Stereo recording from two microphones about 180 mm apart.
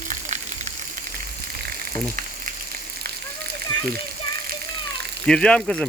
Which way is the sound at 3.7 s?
25° left (ahead or behind).